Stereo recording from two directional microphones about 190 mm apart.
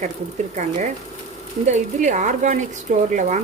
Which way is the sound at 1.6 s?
40° right (ahead or behind).